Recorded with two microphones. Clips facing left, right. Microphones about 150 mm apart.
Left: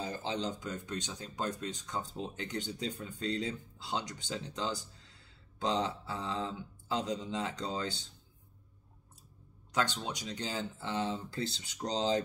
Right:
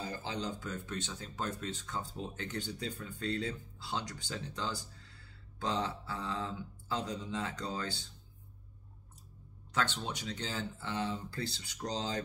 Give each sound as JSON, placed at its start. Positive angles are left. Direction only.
{"t": 0.0, "sound": "speech", "side_deg": 20}
{"t": 9.7, "sound": "speech", "side_deg": 15}